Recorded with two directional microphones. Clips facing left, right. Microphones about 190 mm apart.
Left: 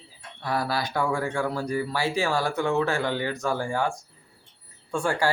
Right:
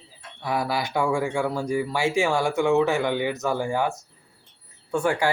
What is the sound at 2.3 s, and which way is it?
Speech, 20° right (ahead or behind).